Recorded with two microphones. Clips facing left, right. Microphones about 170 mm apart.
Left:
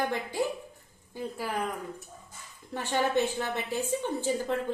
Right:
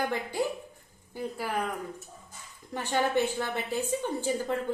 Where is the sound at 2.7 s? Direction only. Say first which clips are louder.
Even; 15° right (ahead or behind).